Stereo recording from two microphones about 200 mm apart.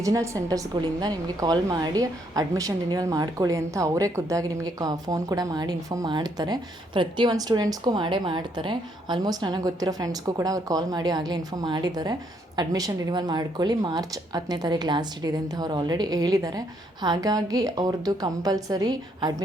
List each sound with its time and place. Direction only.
0.0 s a woman's voice: 15° right (ahead or behind)